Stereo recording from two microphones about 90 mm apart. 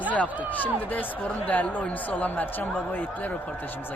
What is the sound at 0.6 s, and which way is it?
Speech, 20° left (ahead or behind).